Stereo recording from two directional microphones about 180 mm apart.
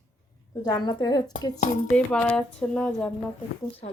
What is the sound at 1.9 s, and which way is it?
Speech, 5° left (ahead or behind).